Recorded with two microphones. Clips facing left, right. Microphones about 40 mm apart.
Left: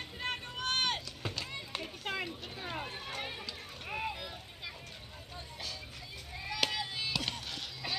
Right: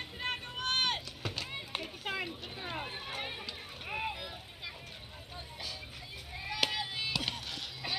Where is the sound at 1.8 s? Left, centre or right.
Centre.